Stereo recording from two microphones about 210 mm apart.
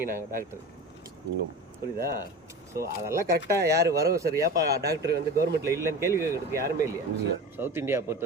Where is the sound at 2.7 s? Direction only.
15° right (ahead or behind).